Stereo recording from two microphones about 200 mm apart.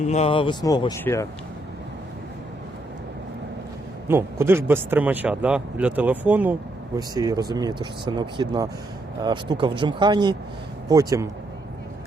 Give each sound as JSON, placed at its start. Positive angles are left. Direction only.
{"t": 0.0, "sound": "speech", "side_deg": 35}
{"t": 4.1, "sound": "speech", "side_deg": -10}
{"t": 7.1, "sound": "speech", "side_deg": -20}